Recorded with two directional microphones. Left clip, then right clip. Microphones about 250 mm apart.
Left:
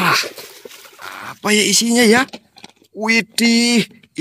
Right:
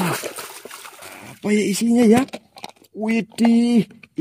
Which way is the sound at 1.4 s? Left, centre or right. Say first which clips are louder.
Left 6 dB; left.